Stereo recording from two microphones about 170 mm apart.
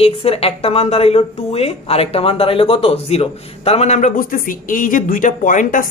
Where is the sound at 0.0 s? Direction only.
35° left (ahead or behind).